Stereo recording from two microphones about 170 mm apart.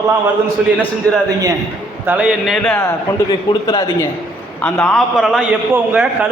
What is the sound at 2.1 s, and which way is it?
Speech, 10° right (ahead or behind).